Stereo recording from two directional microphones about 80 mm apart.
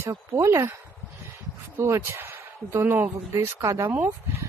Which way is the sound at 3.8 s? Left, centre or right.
Right.